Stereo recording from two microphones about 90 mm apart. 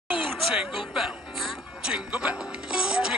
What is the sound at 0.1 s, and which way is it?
Speech, 10° right (ahead or behind).